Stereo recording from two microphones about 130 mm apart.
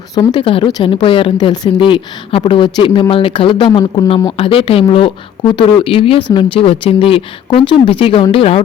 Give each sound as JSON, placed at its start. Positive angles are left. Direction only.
{"t": 0.1, "sound": "speech", "side_deg": 35}